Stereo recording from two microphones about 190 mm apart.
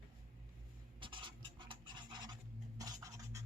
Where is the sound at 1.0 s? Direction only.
25° right (ahead or behind).